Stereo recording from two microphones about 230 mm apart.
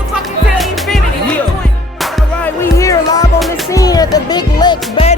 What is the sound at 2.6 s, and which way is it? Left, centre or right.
Music, centre.